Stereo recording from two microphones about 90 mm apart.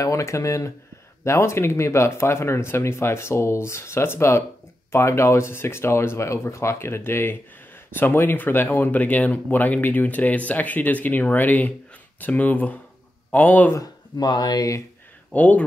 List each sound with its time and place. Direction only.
0.0 s speech: 35° left (ahead or behind)
13.7 s speech: 50° left (ahead or behind)
15.3 s speech: 15° left (ahead or behind)